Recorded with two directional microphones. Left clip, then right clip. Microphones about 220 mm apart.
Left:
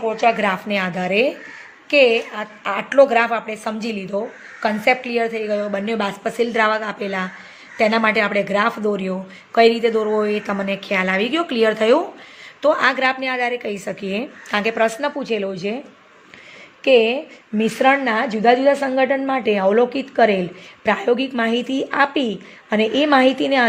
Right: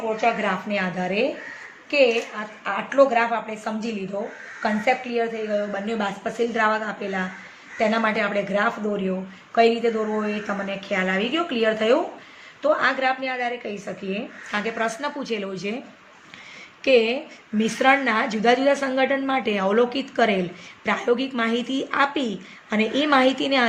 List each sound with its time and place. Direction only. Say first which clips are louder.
0.2 s a woman's voice: left 6 dB; 50° left (ahead or behind); by 15.7 s 30° left (ahead or behind)
16.8 s a woman's voice: left 4 dB; 25° left (ahead or behind)